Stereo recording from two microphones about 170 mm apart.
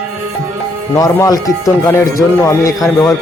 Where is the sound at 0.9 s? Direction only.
20° left (ahead or behind).